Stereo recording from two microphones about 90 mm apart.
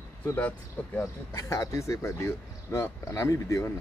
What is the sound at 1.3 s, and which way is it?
Speech, 35° left (ahead or behind).